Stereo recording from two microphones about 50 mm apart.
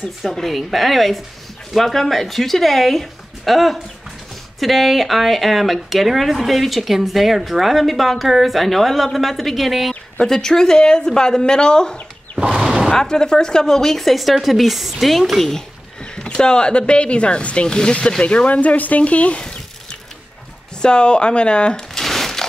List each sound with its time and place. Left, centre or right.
0.0 s speech: centre
10.2 s speech: centre
12.4 s a sound: centre
12.9 s speech: centre
16.2 s speech: centre
20.8 s speech: centre